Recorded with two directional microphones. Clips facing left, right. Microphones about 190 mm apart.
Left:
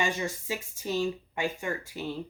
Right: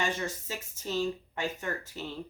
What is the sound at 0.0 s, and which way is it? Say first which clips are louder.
Speech: left 2 dB; 10° left (ahead or behind).